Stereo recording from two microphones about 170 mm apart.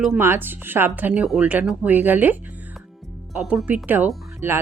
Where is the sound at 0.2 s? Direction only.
15° right (ahead or behind).